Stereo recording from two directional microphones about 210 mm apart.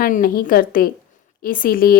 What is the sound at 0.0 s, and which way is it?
A woman's voice, 40° left (ahead or behind).